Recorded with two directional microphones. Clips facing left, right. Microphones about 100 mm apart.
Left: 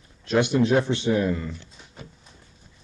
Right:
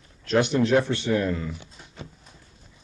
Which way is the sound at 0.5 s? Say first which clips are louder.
Even; 20° left (ahead or behind).